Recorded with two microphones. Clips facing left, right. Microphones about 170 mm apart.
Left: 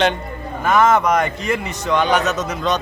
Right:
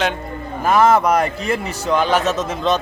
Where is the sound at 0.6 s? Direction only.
35° right (ahead or behind).